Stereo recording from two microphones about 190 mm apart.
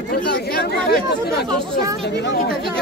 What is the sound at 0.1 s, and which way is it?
Chatter, 55° left (ahead or behind).